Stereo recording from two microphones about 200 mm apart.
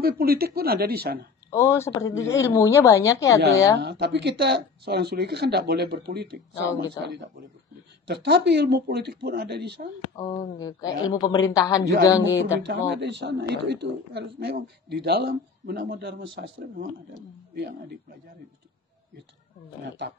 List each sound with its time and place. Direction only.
0.0 s speech: 50° right (ahead or behind)
1.5 s a woman's voice: 15° left (ahead or behind)
3.8 s a woman's voice: 55° right (ahead or behind)
10.1 s a woman's voice: 15° left (ahead or behind)
12.5 s a woman's voice: 60° right (ahead or behind)